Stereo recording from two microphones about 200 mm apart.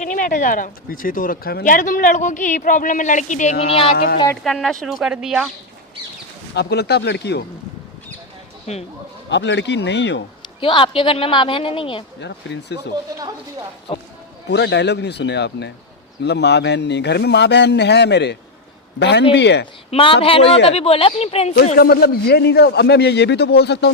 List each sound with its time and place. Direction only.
0.0 s speech: 40° left (ahead or behind)
3.9 s speech: 50° left (ahead or behind)
4.4 s speech: centre (ahead or behind)
6.5 s a man's voice: 55° left (ahead or behind)
9.3 s a man's voice: 60° left (ahead or behind)
10.6 s a woman's voice: 25° left (ahead or behind)
12.2 s a man's voice: 60° left (ahead or behind)
13.1 s speech: 15° right (ahead or behind)
14.4 s a man's voice: 60° left (ahead or behind)
19.9 s a woman's voice: 25° left (ahead or behind)
21.8 s a man's voice: 50° left (ahead or behind)